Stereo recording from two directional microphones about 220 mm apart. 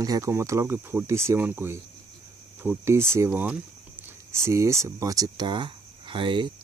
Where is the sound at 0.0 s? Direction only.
15° right (ahead or behind).